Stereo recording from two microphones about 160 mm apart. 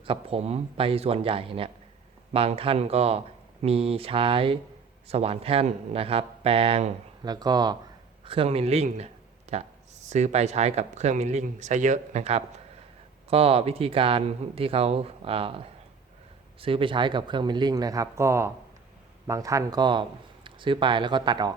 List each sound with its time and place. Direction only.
0.0 s speech: 35° right (ahead or behind)
7.3 s speech: 25° right (ahead or behind)